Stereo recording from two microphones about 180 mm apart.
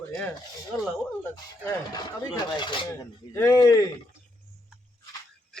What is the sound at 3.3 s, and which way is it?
Speech, 20° left (ahead or behind).